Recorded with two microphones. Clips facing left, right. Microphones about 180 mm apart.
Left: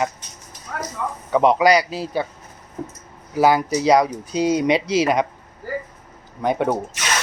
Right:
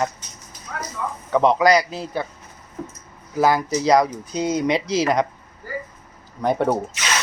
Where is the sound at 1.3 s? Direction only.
10° left (ahead or behind).